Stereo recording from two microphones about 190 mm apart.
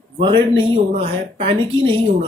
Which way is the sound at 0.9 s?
35° right (ahead or behind).